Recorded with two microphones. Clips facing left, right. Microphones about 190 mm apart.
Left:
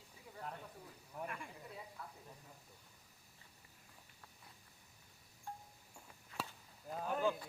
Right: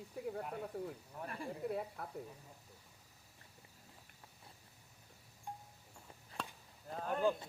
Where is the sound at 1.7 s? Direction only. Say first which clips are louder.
Right 11 dB; 60° right (ahead or behind).